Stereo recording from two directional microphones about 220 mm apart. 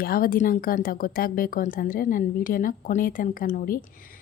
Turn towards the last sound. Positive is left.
turn(degrees=40)  # may be behind; listen again after turning